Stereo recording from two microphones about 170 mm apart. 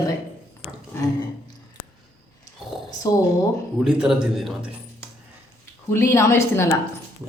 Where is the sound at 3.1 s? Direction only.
20° left (ahead or behind).